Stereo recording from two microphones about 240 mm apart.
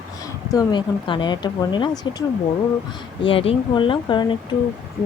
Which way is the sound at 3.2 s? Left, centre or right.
Left.